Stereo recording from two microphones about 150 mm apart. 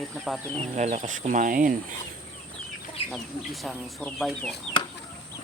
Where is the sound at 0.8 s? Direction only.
50° right (ahead or behind).